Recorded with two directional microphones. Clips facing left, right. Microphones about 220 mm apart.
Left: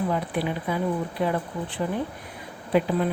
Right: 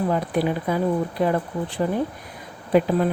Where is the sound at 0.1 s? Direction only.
45° right (ahead or behind).